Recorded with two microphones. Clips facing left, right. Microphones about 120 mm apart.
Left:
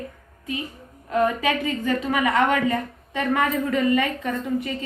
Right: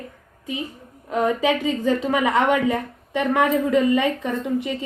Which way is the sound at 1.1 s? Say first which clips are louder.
Right 1 dB; 20° right (ahead or behind).